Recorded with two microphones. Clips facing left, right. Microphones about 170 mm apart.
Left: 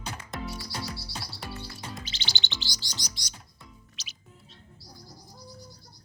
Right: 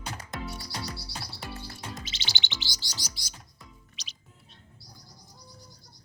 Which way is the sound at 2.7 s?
5° right (ahead or behind).